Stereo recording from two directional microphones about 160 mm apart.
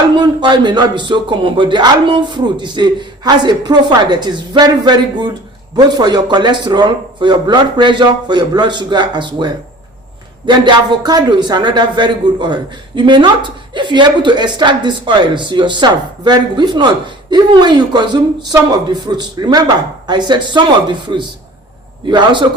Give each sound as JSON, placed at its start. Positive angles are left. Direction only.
{"t": 0.2, "sound": "speech", "side_deg": -30}